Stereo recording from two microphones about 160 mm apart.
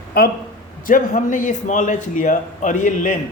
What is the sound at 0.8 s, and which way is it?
Speech, 55° left (ahead or behind).